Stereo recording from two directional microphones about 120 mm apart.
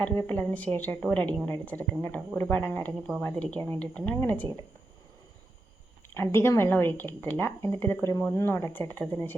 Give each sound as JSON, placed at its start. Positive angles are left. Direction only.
{"t": 0.0, "sound": "speech", "side_deg": 15}
{"t": 6.1, "sound": "a woman's voice", "side_deg": 20}